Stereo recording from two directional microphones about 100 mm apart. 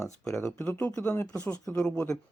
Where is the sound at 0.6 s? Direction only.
20° left (ahead or behind).